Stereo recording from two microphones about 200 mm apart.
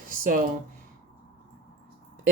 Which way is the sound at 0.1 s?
45° right (ahead or behind).